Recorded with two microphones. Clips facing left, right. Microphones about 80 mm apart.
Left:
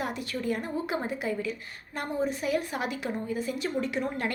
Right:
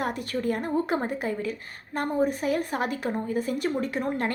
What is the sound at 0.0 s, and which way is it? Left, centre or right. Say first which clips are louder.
A woman's voice: right 4 dB; right.